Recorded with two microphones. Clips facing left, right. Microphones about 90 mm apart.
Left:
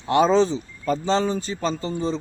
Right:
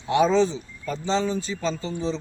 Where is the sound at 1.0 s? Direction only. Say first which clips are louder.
Even; 50° left (ahead or behind).